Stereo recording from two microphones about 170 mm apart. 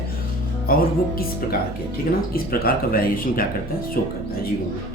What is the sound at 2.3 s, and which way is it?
Speech, 60° left (ahead or behind).